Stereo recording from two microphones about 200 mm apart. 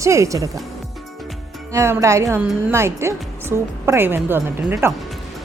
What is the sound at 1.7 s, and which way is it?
A woman's voice, 15° right (ahead or behind).